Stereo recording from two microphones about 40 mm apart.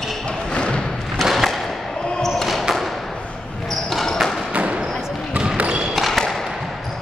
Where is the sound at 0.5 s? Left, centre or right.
Left.